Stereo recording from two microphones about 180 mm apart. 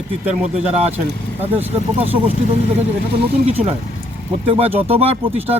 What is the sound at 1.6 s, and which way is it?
Speech, 10° right (ahead or behind).